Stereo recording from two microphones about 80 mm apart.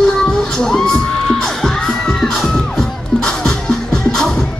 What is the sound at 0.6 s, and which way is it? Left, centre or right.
Crowd, centre.